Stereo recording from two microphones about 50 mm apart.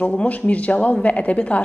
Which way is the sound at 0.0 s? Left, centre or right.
Left.